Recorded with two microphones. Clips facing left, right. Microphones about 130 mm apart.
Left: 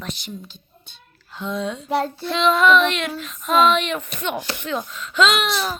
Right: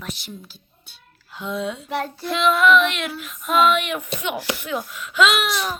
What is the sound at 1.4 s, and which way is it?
Speech, 10° right (ahead or behind).